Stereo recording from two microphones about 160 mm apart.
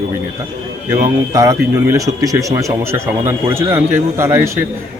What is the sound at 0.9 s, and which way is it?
Speech, 20° right (ahead or behind).